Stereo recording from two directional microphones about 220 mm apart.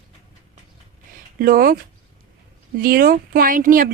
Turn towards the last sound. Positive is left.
turn(degrees=-40)  # may be behind; listen again after turning